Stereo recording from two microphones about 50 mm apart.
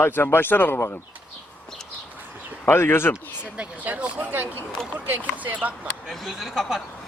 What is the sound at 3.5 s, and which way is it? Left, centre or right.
Speech, right.